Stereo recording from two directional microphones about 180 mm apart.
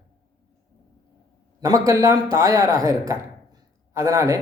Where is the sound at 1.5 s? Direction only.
20° right (ahead or behind).